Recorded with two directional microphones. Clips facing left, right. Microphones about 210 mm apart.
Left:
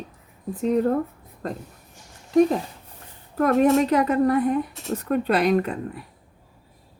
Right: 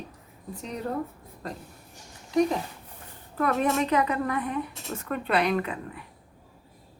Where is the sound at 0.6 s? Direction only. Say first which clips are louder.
Left 12 dB; 50° left (ahead or behind).